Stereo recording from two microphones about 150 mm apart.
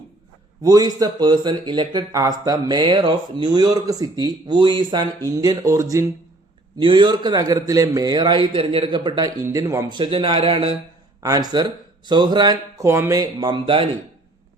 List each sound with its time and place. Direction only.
0.6 s speech: 25° right (ahead or behind)
6.7 s speech: 30° right (ahead or behind)
10.0 s speech: 35° right (ahead or behind)
11.2 s speech: 25° right (ahead or behind)